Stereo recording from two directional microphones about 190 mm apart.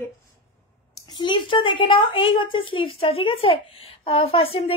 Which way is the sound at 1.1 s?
25° left (ahead or behind).